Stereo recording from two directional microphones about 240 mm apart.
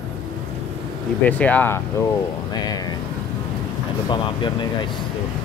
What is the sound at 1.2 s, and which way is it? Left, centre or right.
Speech, centre.